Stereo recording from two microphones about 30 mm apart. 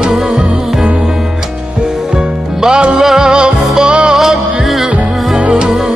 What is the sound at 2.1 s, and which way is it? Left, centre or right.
Music, right.